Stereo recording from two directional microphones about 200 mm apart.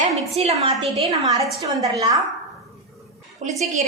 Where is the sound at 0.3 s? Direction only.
30° right (ahead or behind).